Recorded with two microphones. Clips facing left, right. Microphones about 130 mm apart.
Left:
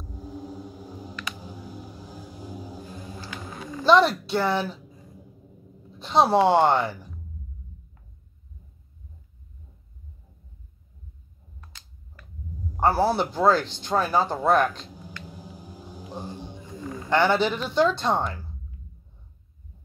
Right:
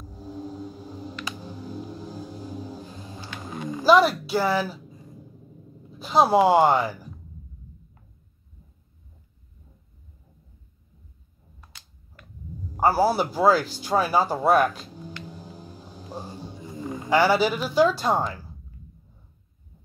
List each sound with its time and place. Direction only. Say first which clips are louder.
1.4 s a sound: right 4 dB; 10° left (ahead or behind)
2.4 s vehicle: left 1 dB; 10° left (ahead or behind)
3.6 s a woman's voice: right 1 dB; 10° right (ahead or behind)
5.9 s speech: right 1 dB; 5° right (ahead or behind)
12.7 s speech: right 1 dB; 5° right (ahead or behind)
15.3 s a sound: right 1 dB; 10° left (ahead or behind)
16.6 s wild animals: right 4 dB; 15° right (ahead or behind)
17.1 s a woman's voice: right 1 dB; 5° right (ahead or behind)